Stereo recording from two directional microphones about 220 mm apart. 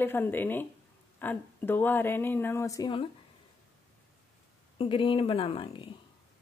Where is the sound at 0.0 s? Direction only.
10° left (ahead or behind).